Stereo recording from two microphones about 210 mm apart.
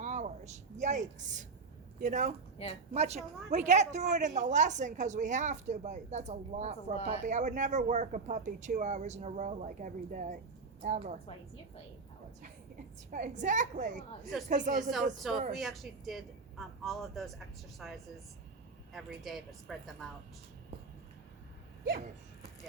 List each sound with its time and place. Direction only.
0.0 s a sound: 35° right (ahead or behind)
2.0 s a woman's voice: 35° right (ahead or behind)
2.6 s a woman's voice: 30° left (ahead or behind)
2.9 s a woman's voice: 30° right (ahead or behind)
13.1 s a woman's voice: 35° right (ahead or behind)
15.5 s speech: centre (ahead or behind)